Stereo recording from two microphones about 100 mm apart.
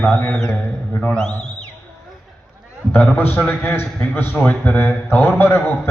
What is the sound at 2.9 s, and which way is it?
A man's voice, 20° left (ahead or behind).